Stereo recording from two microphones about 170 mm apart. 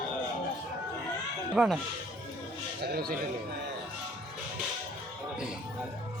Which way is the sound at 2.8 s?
65° right (ahead or behind).